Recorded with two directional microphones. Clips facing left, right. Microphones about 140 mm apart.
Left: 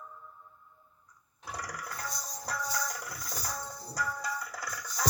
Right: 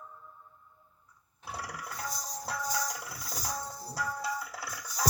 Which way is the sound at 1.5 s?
10° right (ahead or behind).